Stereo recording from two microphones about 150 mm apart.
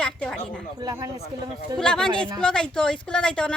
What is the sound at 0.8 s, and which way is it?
Speech, 20° right (ahead or behind).